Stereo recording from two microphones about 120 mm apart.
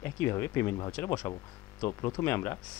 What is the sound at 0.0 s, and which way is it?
Speech, 20° left (ahead or behind).